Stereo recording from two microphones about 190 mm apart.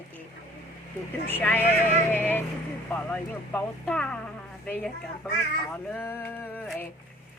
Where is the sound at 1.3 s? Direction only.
10° left (ahead or behind).